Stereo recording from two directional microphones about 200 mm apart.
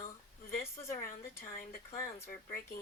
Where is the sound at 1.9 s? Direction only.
15° left (ahead or behind).